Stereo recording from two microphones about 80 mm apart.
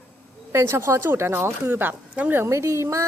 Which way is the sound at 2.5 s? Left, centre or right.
Right.